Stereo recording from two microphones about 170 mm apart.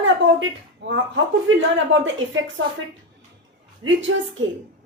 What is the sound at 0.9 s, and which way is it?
A woman's voice, 90° right.